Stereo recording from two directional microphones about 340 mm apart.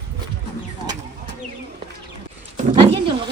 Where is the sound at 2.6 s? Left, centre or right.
Centre.